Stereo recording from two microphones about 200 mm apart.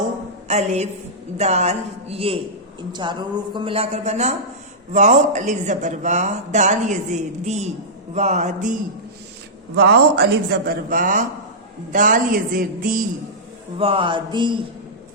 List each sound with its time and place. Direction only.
0.4 s a woman's voice: 35° right (ahead or behind)
9.7 s a man's voice: 55° right (ahead or behind)
10.7 s a woman's voice: 45° right (ahead or behind)
13.7 s speech: 25° right (ahead or behind)